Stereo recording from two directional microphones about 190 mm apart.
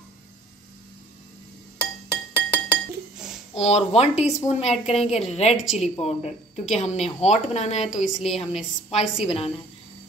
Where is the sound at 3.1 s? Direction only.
5° right (ahead or behind).